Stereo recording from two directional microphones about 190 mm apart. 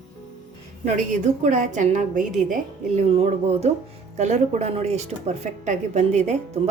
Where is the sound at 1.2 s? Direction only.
40° right (ahead or behind).